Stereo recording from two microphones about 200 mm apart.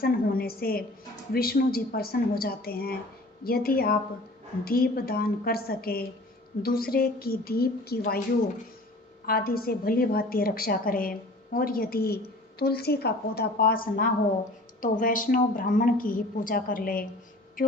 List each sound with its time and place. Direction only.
0.0 s a woman's voice: 50° left (ahead or behind)
9.2 s a woman's voice: 50° left (ahead or behind)